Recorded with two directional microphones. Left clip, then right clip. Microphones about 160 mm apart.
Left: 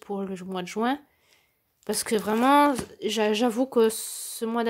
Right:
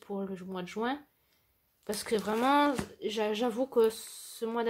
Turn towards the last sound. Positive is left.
turn(degrees=35)  # may be behind; listen again after turning